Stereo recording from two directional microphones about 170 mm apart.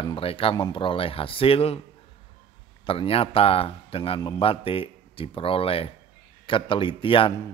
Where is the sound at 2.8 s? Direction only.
35° left (ahead or behind).